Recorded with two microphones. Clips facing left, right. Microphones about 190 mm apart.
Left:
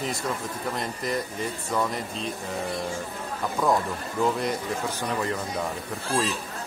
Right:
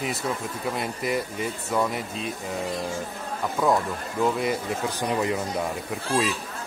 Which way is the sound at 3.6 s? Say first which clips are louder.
Right 1 dB; centre (ahead or behind).